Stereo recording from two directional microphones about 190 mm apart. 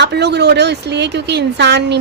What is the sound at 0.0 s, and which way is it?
Speech, 60° right (ahead or behind).